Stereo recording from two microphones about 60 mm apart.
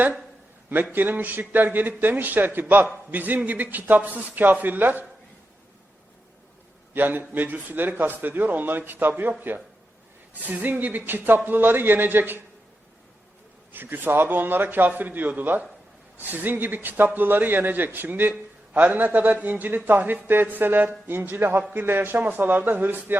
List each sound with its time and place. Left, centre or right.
0.7 s a man's voice: right
6.9 s a man's voice: right
10.4 s a man's voice: right
13.7 s a man's voice: right